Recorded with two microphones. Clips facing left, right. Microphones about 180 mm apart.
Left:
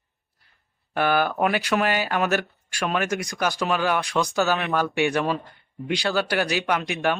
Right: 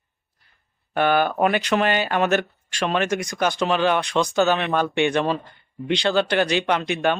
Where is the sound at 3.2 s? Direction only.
Centre (ahead or behind).